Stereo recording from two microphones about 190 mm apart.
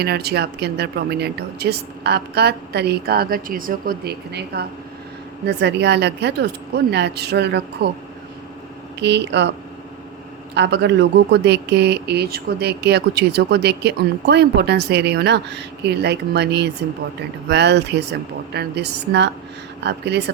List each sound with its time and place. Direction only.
0.0 s speech: 55° right (ahead or behind)
9.0 s speech: 65° right (ahead or behind)